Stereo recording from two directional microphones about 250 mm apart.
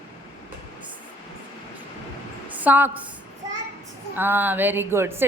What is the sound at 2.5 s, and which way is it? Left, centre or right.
Speech, centre.